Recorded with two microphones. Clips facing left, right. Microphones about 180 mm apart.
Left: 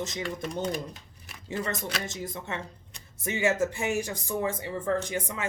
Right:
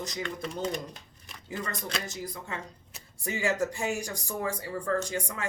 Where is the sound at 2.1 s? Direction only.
25° left (ahead or behind).